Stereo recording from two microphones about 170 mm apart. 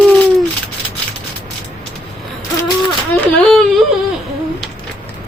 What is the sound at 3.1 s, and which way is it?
Whimper, 5° left (ahead or behind).